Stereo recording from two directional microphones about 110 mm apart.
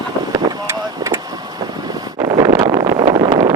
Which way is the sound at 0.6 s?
25° right (ahead or behind).